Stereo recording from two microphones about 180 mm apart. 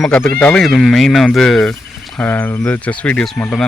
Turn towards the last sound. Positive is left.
turn(degrees=5)  # may be behind; listen again after turning